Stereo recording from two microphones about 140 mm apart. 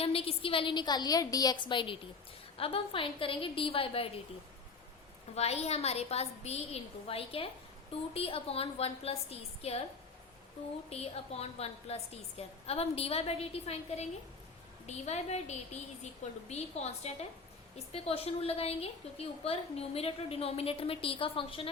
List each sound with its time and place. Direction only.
0.0 s a woman's voice: 45° left (ahead or behind)
5.3 s a woman's voice: 50° left (ahead or behind)
10.8 s a woman's voice: 45° left (ahead or behind)